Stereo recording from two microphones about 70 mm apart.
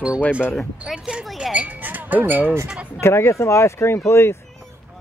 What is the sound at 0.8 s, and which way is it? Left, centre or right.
Speech, centre.